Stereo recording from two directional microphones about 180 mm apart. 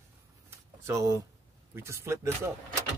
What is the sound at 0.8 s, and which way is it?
Speech, 15° right (ahead or behind).